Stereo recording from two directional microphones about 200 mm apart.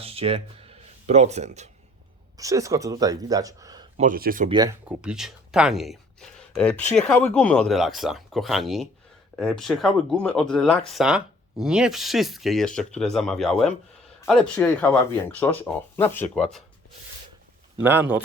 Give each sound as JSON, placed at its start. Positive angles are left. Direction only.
{"t": 0.0, "sound": "speech", "side_deg": -30}
{"t": 2.4, "sound": "speech", "side_deg": -15}
{"t": 3.9, "sound": "speech", "side_deg": -40}
{"t": 4.4, "sound": "speech", "side_deg": -20}
{"t": 4.9, "sound": "speech", "side_deg": -5}
{"t": 17.7, "sound": "speech", "side_deg": -10}